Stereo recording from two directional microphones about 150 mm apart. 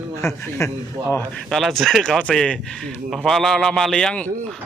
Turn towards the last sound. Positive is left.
turn(degrees=5)  # may be behind; listen again after turning